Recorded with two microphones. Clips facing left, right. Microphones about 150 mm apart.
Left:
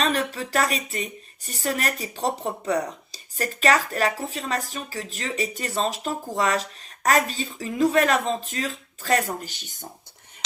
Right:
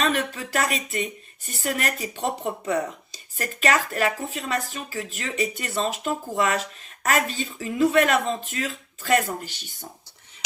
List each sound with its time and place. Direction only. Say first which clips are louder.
0.0 s speech: even; 40° left (ahead or behind)